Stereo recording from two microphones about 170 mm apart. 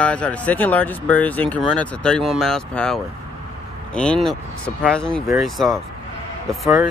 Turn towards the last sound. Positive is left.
turn(degrees=0)  # may be behind; listen again after turning